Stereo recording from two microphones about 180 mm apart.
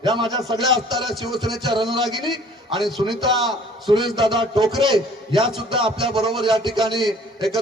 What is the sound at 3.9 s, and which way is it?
A man's voice, 25° right (ahead or behind).